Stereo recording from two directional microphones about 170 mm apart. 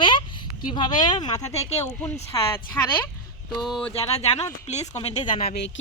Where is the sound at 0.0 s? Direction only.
30° left (ahead or behind).